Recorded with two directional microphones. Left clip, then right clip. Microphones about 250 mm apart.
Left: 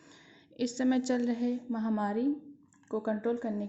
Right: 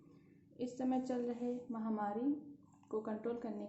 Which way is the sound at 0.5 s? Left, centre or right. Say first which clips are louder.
Left 8 dB; left.